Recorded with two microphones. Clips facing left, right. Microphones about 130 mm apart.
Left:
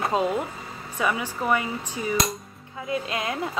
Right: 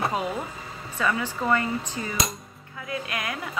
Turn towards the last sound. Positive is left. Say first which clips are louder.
# left 4 dB
turn(degrees=25)  # may be behind; listen again after turning